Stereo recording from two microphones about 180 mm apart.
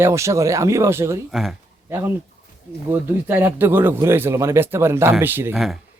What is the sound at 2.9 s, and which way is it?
Speech, 10° right (ahead or behind).